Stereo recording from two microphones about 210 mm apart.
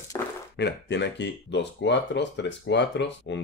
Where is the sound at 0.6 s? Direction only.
55° left (ahead or behind).